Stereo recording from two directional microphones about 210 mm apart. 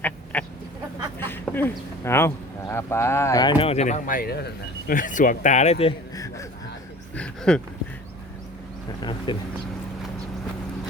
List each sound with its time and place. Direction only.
0.3 s duck: 10° left (ahead or behind)
1.2 s speech: 10° left (ahead or behind); by 5.9 s 30° left (ahead or behind)
6.1 s a sound: 15° left (ahead or behind)
7.2 s speech: 5° left (ahead or behind)
9.0 s speech: 20° left (ahead or behind)